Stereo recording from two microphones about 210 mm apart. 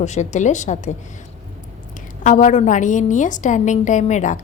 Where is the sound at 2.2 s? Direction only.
35° left (ahead or behind).